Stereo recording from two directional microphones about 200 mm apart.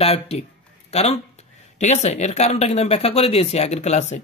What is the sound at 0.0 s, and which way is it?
Speech, 30° left (ahead or behind).